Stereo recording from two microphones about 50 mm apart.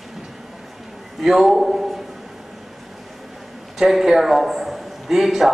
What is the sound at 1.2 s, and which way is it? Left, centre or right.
Speech, centre.